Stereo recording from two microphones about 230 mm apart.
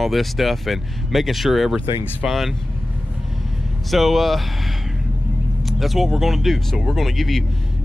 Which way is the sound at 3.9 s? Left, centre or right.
Centre.